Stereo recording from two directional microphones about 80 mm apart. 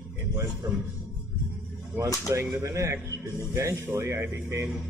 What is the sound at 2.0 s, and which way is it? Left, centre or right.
Speech, right.